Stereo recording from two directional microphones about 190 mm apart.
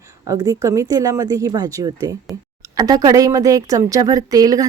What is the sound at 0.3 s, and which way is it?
A woman's voice, 20° right (ahead or behind).